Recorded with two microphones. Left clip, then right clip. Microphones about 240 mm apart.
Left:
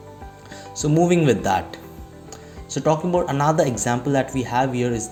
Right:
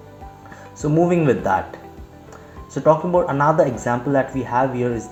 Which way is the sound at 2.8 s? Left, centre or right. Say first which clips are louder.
Right 4 dB; left.